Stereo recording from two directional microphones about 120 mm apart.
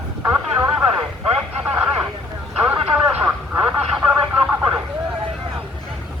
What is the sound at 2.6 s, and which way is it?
Radio, 15° right (ahead or behind).